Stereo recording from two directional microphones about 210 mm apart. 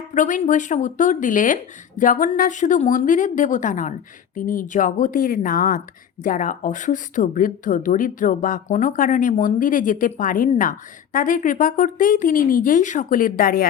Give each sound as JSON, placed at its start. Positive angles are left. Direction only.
{"t": 0.1, "sound": "a woman's voice", "side_deg": 35}